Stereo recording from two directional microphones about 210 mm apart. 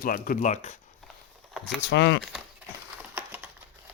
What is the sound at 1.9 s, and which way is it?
Speech, 55° left (ahead or behind).